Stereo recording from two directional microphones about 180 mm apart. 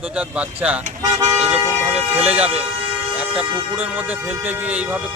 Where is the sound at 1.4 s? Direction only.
5° right (ahead or behind).